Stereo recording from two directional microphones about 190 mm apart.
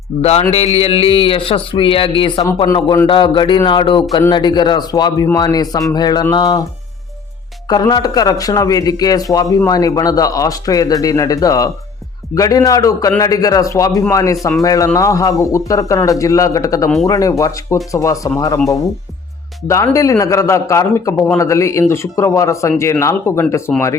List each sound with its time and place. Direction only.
0.2 s a man's voice: 35° left (ahead or behind)
7.7 s a man's voice: 20° left (ahead or behind)
19.6 s a man's voice: 15° left (ahead or behind)